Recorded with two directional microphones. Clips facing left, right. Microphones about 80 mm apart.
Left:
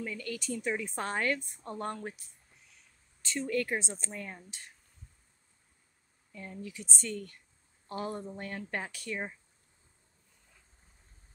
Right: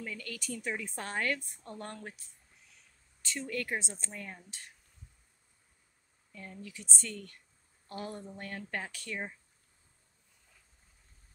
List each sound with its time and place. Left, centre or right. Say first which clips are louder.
0.0 s a woman's voice: left 4 dB; left
3.2 s a woman's voice: left 5 dB; left
6.3 s a woman's voice: left 4 dB; left